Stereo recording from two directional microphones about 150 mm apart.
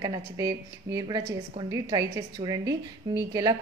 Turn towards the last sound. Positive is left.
turn(degrees=-25)  # may be behind; listen again after turning